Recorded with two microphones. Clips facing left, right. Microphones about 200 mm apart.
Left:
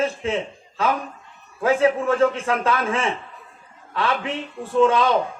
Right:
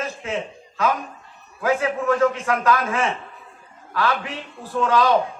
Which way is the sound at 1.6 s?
30° left (ahead or behind).